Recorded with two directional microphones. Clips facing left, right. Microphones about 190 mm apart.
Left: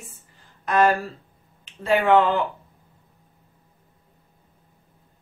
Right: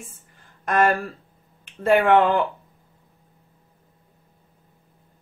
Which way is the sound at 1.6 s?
50° right (ahead or behind).